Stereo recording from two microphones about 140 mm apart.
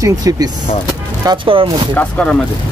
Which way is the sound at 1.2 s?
35° right (ahead or behind).